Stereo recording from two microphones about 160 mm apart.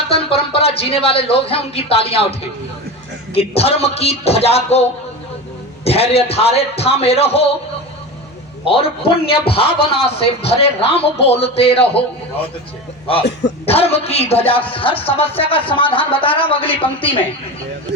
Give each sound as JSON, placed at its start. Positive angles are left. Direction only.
{"t": 0.1, "sound": "speech", "side_deg": 35}
{"t": 3.3, "sound": "speech", "side_deg": 40}
{"t": 8.6, "sound": "speech", "side_deg": 35}
{"t": 13.7, "sound": "speech", "side_deg": 40}